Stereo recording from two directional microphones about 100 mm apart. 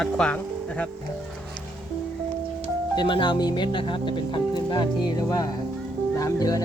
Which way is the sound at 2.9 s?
50° left (ahead or behind).